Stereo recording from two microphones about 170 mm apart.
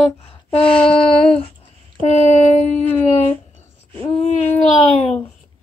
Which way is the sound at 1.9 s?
40° left (ahead or behind).